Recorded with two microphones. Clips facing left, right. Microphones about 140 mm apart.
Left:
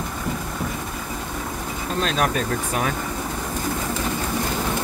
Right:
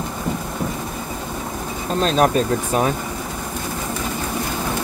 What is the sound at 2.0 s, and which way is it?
Speech, 35° right (ahead or behind).